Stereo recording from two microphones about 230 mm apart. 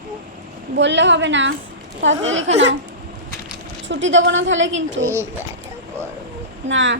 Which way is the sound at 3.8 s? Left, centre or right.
Right.